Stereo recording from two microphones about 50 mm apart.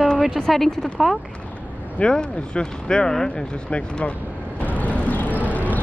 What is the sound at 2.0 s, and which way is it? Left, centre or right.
Speech, centre.